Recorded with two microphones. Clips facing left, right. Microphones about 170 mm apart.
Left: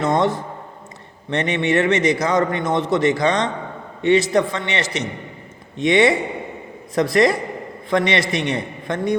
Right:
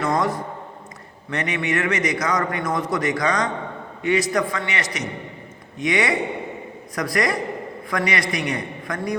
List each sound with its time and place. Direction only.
0.0 s a man's voice: 25° left (ahead or behind)